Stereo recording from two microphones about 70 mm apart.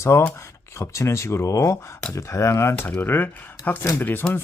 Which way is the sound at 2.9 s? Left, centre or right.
Left.